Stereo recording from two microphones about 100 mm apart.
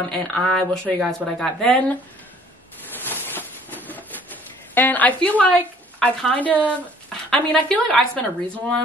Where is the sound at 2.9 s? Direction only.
20° left (ahead or behind).